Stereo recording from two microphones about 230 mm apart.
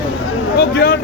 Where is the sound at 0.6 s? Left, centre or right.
Left.